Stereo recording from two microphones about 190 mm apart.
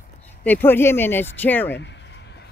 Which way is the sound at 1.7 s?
65° left (ahead or behind).